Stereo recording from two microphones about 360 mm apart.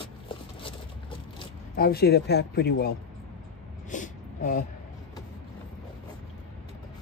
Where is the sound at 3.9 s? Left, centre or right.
Left.